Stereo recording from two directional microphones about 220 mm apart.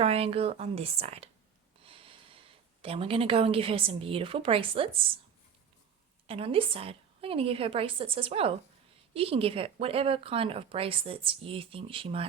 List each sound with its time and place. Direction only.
0.0 s speech: 25° right (ahead or behind)
6.2 s speech: 25° right (ahead or behind)